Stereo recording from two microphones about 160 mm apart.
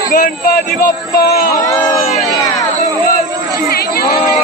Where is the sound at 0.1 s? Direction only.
60° left (ahead or behind).